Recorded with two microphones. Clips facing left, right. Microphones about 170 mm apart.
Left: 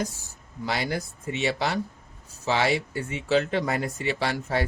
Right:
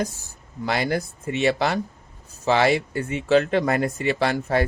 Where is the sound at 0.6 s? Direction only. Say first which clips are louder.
Right 5 dB; 55° right (ahead or behind).